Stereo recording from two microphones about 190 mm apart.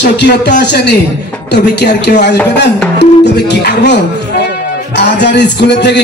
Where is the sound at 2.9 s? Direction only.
65° left (ahead or behind).